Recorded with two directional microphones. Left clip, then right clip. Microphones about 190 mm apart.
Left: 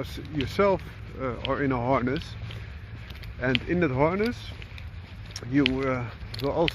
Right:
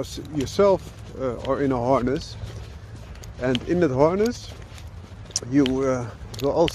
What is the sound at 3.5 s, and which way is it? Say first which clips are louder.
Speech: right 5 dB; 15° right (ahead or behind).